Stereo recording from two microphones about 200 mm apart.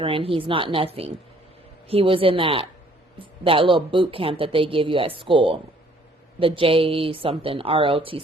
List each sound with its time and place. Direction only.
0.0 s speech: 25° right (ahead or behind)